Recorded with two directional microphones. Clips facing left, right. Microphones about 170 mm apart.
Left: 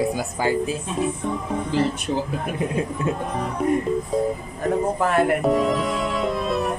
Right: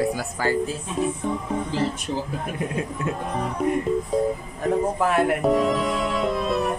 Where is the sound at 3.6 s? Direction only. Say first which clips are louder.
Left 2 dB; centre (ahead or behind).